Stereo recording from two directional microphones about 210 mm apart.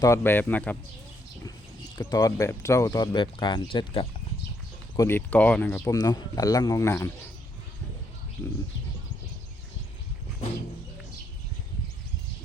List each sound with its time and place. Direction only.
0.0 s speech: 10° left (ahead or behind)
2.0 s speech: 15° left (ahead or behind)
4.9 s speech: 10° left (ahead or behind)